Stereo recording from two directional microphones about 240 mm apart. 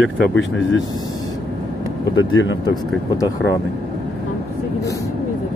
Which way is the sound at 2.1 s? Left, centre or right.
Left.